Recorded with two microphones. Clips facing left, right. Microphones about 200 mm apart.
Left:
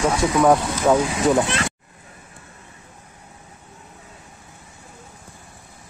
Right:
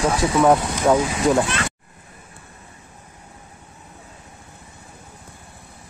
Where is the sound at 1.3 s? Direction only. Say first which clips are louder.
Even; 25° left (ahead or behind).